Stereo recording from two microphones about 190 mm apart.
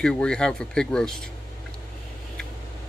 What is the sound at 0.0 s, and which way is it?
Speech, 5° left (ahead or behind).